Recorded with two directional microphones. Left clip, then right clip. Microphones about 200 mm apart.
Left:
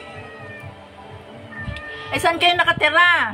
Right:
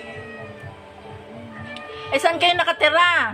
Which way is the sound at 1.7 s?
10° right (ahead or behind).